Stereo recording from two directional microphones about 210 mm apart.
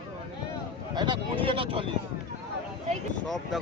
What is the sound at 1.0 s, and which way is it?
Speech, 25° right (ahead or behind).